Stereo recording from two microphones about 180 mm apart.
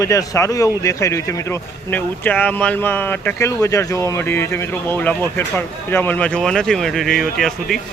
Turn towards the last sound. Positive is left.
turn(degrees=0)  # may be behind; listen again after turning